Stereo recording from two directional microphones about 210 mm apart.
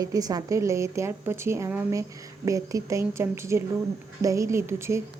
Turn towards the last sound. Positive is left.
turn(degrees=-10)  # may be behind; listen again after turning